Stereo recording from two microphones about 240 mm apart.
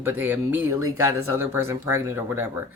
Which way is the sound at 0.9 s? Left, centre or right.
Right.